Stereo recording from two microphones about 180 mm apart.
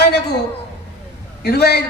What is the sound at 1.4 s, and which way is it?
Speech, 65° left (ahead or behind).